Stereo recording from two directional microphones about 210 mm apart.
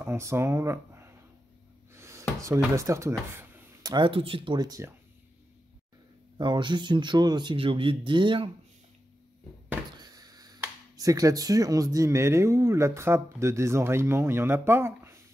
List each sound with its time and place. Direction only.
0.0 s speech: 10° right (ahead or behind)
6.3 s speech: 20° right (ahead or behind)
9.9 s speech: 20° right (ahead or behind)